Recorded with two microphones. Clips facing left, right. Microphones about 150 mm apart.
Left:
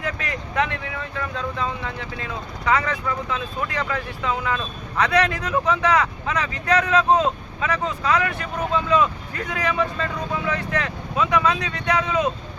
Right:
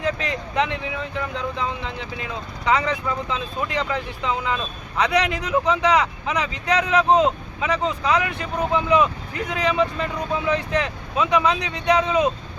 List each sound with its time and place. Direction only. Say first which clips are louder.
0.0 s speech: right 4 dB; 20° right (ahead or behind)